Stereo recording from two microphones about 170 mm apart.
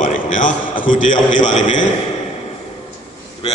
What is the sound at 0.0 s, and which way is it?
A man's voice, 50° left (ahead or behind).